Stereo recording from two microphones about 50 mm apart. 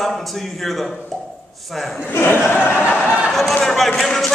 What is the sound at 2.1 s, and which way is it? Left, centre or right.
Crowd, left.